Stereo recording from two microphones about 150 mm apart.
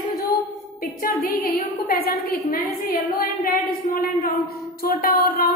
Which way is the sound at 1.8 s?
90° left.